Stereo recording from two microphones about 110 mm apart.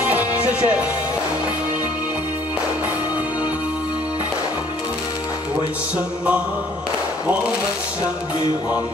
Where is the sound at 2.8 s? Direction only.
10° right (ahead or behind).